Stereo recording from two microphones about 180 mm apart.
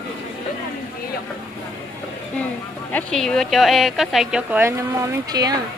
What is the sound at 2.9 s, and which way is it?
Speech, 5° left (ahead or behind).